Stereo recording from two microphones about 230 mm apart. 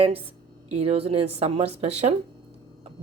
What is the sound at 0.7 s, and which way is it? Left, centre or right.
Speech, right.